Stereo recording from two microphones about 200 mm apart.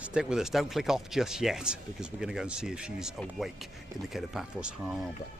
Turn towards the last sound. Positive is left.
turn(degrees=0)  # may be behind; listen again after turning